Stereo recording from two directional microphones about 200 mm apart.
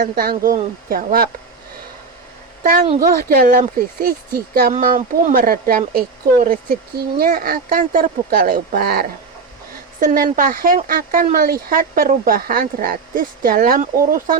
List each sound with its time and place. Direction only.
0.0 s speech: 45° right (ahead or behind)
3.0 s speech: 45° right (ahead or behind)